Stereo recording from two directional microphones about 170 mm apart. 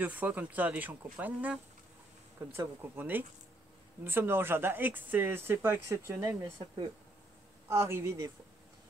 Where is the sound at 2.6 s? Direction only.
10° right (ahead or behind).